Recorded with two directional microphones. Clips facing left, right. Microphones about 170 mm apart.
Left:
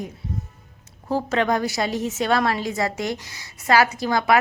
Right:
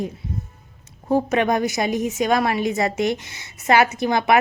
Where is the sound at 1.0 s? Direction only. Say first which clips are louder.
Right 3 dB; 20° right (ahead or behind).